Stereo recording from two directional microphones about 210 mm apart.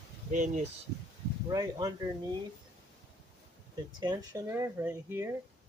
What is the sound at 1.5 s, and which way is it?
Speech, 20° right (ahead or behind).